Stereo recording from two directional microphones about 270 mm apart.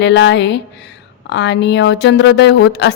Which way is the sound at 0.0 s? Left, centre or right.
Left.